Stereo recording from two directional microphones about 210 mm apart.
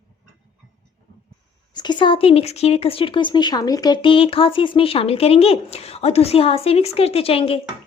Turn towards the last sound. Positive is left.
turn(degrees=25)  # may be behind; listen again after turning